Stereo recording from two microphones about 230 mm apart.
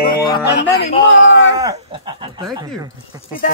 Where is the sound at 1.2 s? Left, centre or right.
Left.